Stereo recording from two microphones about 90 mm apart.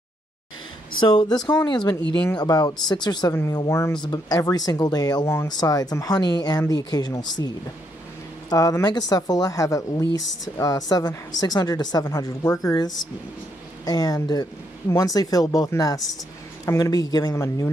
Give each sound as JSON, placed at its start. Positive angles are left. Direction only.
{"t": 1.0, "sound": "speech", "side_deg": 55}
{"t": 3.4, "sound": "speech", "side_deg": 40}
{"t": 5.2, "sound": "speech", "side_deg": 30}
{"t": 5.5, "sound": "speech", "side_deg": 45}